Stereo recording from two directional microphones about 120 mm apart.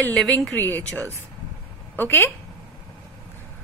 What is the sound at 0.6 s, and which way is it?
A woman's voice, 15° left (ahead or behind).